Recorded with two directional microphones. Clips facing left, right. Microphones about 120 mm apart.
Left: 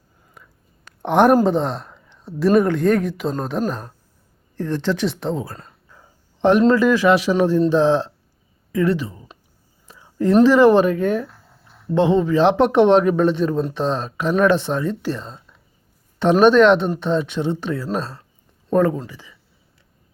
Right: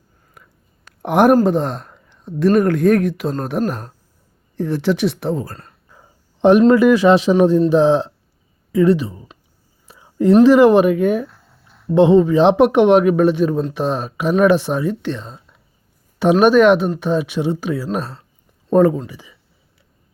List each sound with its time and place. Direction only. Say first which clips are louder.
1.0 s speech: right 2 dB; 5° right (ahead or behind)
5.9 s speech: right 1 dB; 15° right (ahead or behind)
9.8 s whispering: right 4 dB; 15° right (ahead or behind)
10.4 s speech: right 2 dB; 15° right (ahead or behind)
12.6 s speech: right 2 dB; 5° right (ahead or behind)
15.0 s speech: right 1 dB; centre (ahead or behind); by 19.3 s 15° right (ahead or behind)